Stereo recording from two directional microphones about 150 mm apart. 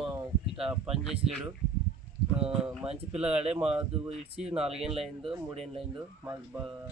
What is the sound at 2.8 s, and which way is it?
Speech, 45° right (ahead or behind).